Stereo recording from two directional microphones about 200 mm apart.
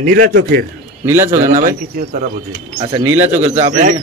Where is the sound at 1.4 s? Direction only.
40° right (ahead or behind).